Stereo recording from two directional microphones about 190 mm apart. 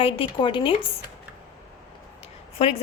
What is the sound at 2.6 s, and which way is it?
Speech, 30° left (ahead or behind).